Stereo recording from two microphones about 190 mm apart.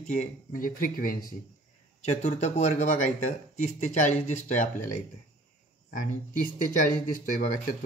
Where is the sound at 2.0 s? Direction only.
35° left (ahead or behind).